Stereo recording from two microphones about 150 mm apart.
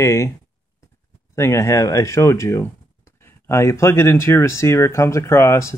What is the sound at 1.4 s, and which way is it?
Speech, 20° left (ahead or behind).